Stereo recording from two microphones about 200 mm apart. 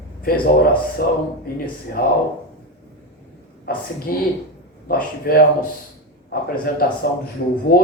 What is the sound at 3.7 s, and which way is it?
A man's voice, 50° left (ahead or behind).